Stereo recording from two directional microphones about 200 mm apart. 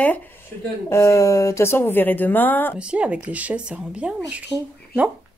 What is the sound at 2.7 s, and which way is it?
Speech, 5° right (ahead or behind).